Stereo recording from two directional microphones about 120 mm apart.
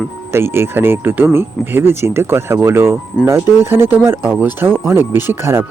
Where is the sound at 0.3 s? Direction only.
20° right (ahead or behind).